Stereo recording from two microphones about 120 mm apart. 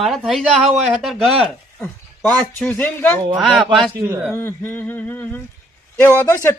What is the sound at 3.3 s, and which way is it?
Speech, centre (ahead or behind).